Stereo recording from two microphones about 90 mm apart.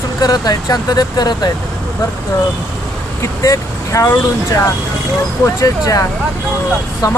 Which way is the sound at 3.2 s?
35° left (ahead or behind).